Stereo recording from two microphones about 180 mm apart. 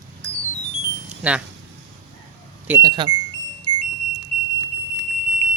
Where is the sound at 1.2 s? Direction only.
5° right (ahead or behind).